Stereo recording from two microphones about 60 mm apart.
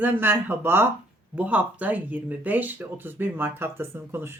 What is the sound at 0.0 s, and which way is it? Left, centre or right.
Speech, right.